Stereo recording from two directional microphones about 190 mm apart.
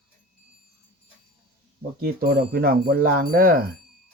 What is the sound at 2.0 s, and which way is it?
Speech, 50° right (ahead or behind).